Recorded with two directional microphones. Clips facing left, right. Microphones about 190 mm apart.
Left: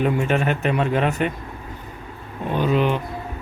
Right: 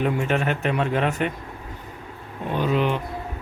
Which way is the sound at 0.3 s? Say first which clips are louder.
Left 2 dB; 15° left (ahead or behind).